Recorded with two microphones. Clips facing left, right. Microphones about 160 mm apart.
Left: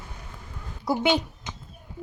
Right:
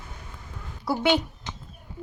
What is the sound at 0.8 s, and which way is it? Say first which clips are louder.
Speech: even; 15° left (ahead or behind).